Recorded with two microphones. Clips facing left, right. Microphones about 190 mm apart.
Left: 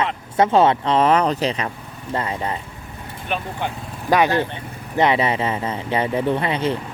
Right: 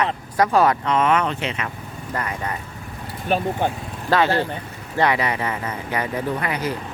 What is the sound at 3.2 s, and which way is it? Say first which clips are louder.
Speech: right 5 dB; 40° right (ahead or behind).